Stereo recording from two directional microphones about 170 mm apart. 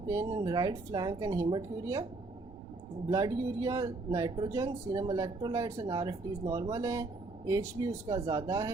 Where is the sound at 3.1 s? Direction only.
20° right (ahead or behind).